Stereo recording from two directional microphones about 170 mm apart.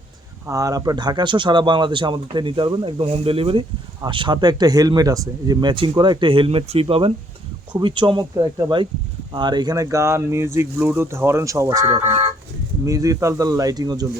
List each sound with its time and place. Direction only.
0.4 s speech: 20° right (ahead or behind)